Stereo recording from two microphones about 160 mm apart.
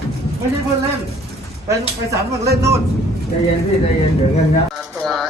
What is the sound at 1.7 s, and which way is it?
Speech, 20° right (ahead or behind).